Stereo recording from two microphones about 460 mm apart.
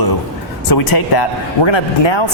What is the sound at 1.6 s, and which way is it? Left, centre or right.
Speech, left.